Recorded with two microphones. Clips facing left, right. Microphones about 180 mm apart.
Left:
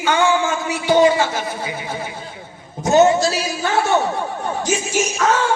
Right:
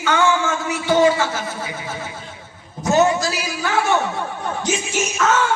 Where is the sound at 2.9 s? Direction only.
25° left (ahead or behind).